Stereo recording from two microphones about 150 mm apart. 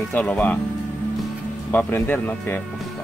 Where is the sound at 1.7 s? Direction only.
10° left (ahead or behind).